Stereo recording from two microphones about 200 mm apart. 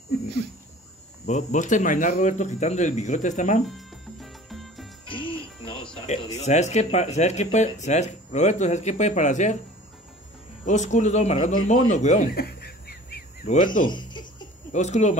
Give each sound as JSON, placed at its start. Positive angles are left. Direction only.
{"t": 1.2, "sound": "speech", "side_deg": 35}
{"t": 3.6, "sound": "music", "side_deg": 0}
{"t": 5.0, "sound": "music", "side_deg": 25}
{"t": 5.9, "sound": "speech", "side_deg": 25}
{"t": 10.6, "sound": "speech", "side_deg": 35}
{"t": 12.4, "sound": "a sound", "side_deg": 50}
{"t": 13.8, "sound": "a sound", "side_deg": 20}
{"t": 14.7, "sound": "speech", "side_deg": 35}